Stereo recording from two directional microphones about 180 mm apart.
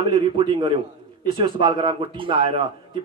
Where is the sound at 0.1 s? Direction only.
25° right (ahead or behind).